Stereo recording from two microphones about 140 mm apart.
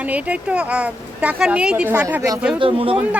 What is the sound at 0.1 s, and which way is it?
A woman's voice, 10° right (ahead or behind).